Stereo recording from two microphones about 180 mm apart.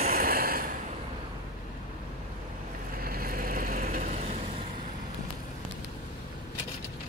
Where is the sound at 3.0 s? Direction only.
55° right (ahead or behind).